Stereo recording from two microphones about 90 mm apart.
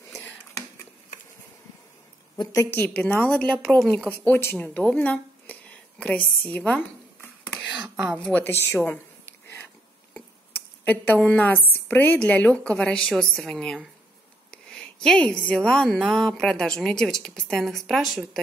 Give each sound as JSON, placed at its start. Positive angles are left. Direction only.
{"t": 2.3, "sound": "a woman's voice", "side_deg": 50}
{"t": 3.0, "sound": "a woman's voice", "side_deg": 15}
{"t": 4.2, "sound": "a woman's voice", "side_deg": 25}
{"t": 8.2, "sound": "a woman's voice", "side_deg": 15}
{"t": 8.5, "sound": "speech", "side_deg": 25}
{"t": 8.7, "sound": "a woman's voice", "side_deg": 15}
{"t": 10.9, "sound": "a woman's voice", "side_deg": 15}